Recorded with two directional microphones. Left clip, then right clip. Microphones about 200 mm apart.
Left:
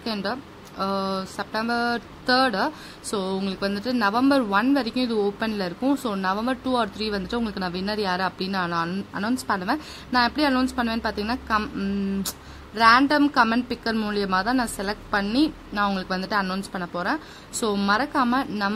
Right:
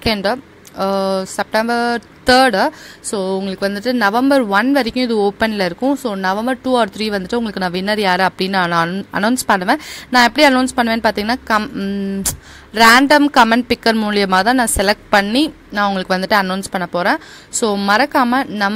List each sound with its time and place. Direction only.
0.0 s speech: 35° right (ahead or behind)